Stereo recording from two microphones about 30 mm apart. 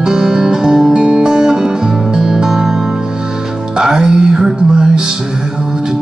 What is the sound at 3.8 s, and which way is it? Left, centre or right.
Music, right.